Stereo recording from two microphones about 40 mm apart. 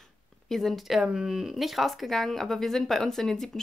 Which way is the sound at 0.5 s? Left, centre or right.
Centre.